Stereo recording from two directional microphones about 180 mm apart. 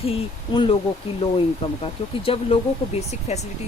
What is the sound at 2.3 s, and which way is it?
Speech, 35° left (ahead or behind).